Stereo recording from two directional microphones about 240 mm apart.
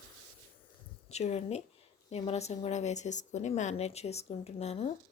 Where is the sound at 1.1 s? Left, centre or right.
Left.